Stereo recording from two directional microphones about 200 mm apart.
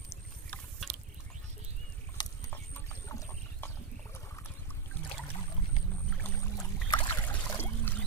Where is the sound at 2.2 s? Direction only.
20° left (ahead or behind).